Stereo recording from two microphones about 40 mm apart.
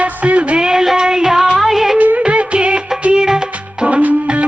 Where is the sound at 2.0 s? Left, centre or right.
Right; by 3.8 s centre.